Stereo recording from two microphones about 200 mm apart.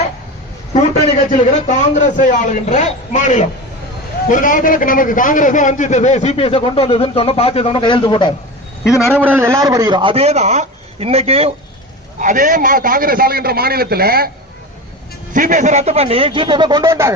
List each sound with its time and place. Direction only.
0.7 s a sound: 30° left (ahead or behind)
1.6 s a man's voice: 40° left (ahead or behind)
9.0 s a man's voice: 10° left (ahead or behind)
9.2 s a man's voice: 10° right (ahead or behind); by 11.5 s 30° right (ahead or behind)
12.2 s a man's voice: 40° right (ahead or behind)
15.3 s a man's voice: 40° right (ahead or behind); by 17.1 s 15° right (ahead or behind)